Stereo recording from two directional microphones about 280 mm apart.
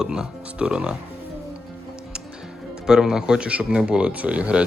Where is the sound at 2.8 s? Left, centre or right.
Centre.